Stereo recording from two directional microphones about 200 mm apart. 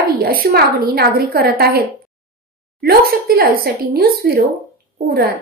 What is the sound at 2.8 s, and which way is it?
A woman's voice, 50° right (ahead or behind).